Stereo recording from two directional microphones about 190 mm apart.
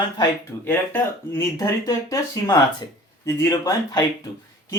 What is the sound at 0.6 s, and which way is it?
Speech, 10° left (ahead or behind).